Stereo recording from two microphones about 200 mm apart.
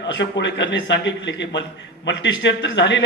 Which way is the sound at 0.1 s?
65° left (ahead or behind).